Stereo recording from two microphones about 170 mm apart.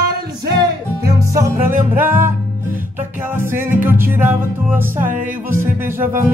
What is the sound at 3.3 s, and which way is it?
Music, 10° right (ahead or behind).